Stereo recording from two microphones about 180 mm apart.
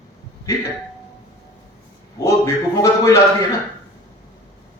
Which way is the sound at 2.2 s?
20° left (ahead or behind).